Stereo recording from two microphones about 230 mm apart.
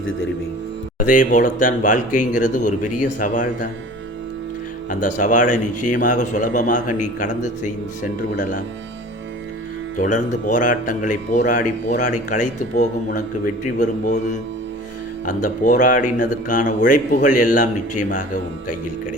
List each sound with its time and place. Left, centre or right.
0.9 s a man's voice: left
4.9 s a man's voice: left
10.0 s a man's voice: left
15.3 s a man's voice: left